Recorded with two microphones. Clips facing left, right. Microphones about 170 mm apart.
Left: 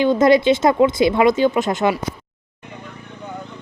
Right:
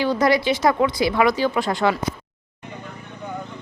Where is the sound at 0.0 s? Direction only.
20° left (ahead or behind).